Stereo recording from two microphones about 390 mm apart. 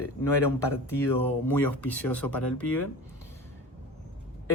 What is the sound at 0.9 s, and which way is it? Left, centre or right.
Speech, centre.